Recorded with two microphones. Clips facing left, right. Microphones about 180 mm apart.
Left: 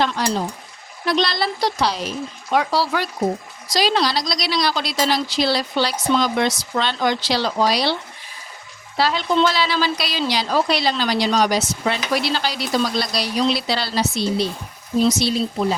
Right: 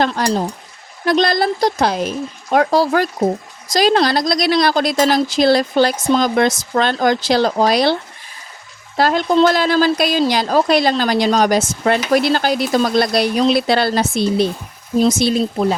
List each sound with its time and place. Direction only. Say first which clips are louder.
0.0 s a woman's voice: right 4 dB; 45° right (ahead or behind)
9.0 s a woman's voice: right 5 dB; 50° right (ahead or behind)